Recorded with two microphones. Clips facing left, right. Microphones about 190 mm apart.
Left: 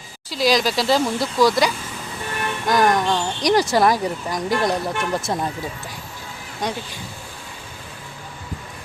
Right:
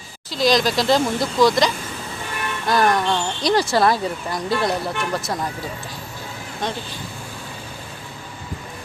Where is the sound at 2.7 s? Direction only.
15° left (ahead or behind).